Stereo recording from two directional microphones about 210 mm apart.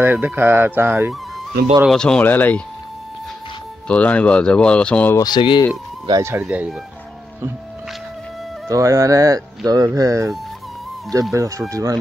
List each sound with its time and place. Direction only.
0.0 s speech: 10° right (ahead or behind)
1.8 s speech: centre (ahead or behind)
3.8 s speech: 5° left (ahead or behind); by 5.7 s 20° left (ahead or behind)
6.0 s speech: 15° right (ahead or behind)
6.4 s speech: 5° right (ahead or behind)
8.6 s speech: 15° right (ahead or behind)
11.3 s speech: 15° right (ahead or behind)